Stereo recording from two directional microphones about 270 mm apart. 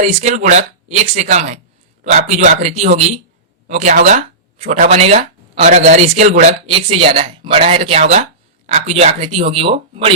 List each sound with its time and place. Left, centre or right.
0.0 s speech: right